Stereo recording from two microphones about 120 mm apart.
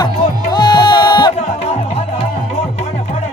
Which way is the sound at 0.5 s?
40° left (ahead or behind).